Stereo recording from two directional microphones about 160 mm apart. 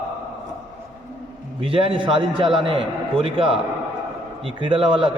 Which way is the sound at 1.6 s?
35° right (ahead or behind).